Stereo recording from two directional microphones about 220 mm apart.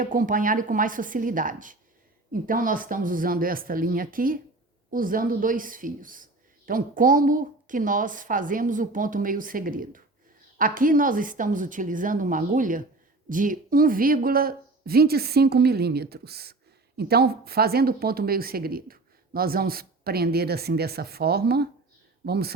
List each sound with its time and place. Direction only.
0.0 s a woman's voice: 35° right (ahead or behind)